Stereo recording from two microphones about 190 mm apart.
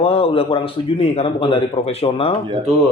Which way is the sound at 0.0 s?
30° left (ahead or behind).